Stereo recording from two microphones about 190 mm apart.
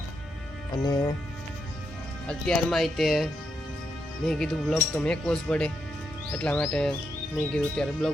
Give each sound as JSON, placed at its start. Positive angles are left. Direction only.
{"t": 0.8, "sound": "speech", "side_deg": 20}
{"t": 2.2, "sound": "speech", "side_deg": 5}
{"t": 4.3, "sound": "speech", "side_deg": 0}